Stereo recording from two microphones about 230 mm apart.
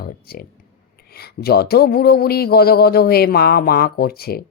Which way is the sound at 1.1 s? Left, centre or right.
Left.